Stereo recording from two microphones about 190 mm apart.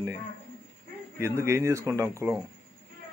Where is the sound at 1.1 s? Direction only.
15° right (ahead or behind).